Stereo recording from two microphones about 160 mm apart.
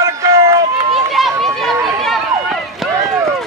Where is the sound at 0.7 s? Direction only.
35° right (ahead or behind).